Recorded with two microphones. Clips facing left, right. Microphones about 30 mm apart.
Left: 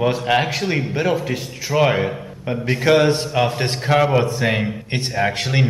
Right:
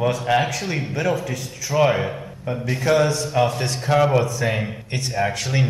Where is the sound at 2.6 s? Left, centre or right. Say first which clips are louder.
Left 4 dB; left.